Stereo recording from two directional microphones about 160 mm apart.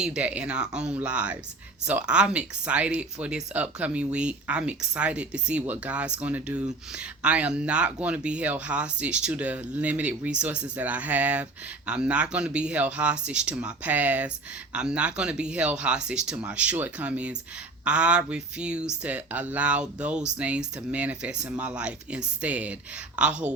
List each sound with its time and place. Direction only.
0.0 s speech: 5° right (ahead or behind)